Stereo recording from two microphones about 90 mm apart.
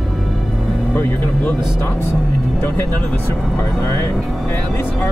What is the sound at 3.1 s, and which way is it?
Speech, 30° left (ahead or behind).